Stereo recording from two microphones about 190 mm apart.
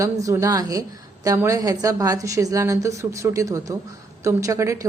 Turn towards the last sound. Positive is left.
turn(degrees=-15)  # may be behind; listen again after turning